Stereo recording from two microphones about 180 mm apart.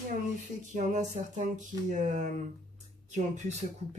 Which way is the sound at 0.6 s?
40° right (ahead or behind).